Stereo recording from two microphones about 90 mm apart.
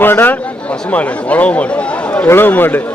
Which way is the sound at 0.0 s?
20° left (ahead or behind).